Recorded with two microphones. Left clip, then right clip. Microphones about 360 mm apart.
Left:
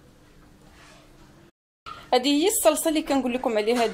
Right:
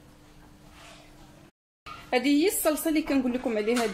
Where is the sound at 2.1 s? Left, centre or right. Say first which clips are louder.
Left 3 dB; left.